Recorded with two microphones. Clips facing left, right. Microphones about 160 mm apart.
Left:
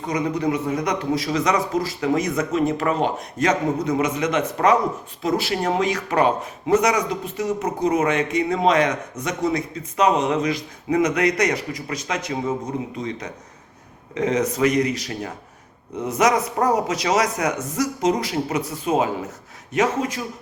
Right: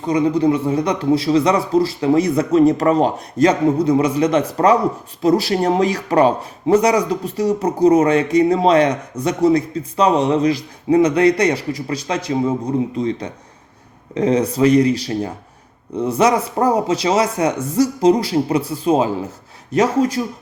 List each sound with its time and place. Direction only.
0.0 s speech: 30° right (ahead or behind)